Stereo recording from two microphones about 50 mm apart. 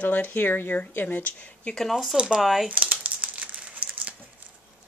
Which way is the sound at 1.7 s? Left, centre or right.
Centre.